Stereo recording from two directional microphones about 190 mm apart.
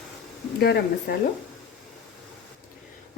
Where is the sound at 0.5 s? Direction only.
55° left (ahead or behind).